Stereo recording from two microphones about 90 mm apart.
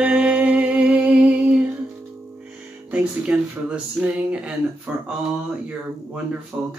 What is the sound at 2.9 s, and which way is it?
Speech, 15° right (ahead or behind).